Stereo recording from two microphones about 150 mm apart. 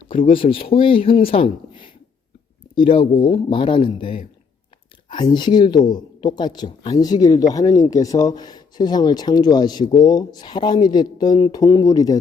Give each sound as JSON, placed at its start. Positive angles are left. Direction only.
{"t": 0.1, "sound": "speech", "side_deg": 35}
{"t": 5.1, "sound": "speech", "side_deg": 30}